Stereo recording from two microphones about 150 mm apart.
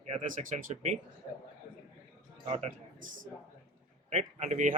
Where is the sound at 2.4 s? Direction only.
45° right (ahead or behind).